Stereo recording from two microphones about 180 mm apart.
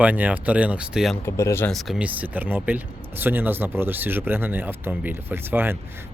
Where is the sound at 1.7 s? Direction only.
Centre (ahead or behind).